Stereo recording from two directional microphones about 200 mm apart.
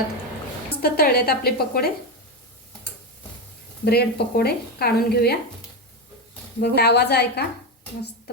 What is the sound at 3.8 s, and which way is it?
Speech, 50° left (ahead or behind).